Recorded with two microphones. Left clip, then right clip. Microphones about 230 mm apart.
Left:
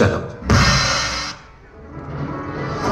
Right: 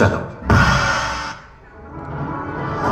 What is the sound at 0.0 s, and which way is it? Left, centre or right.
Music, left.